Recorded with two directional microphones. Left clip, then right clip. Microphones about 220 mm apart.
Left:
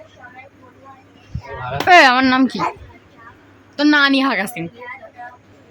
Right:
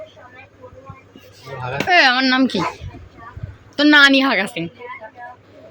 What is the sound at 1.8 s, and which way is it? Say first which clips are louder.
Speech: left 4 dB; 15° left (ahead or behind).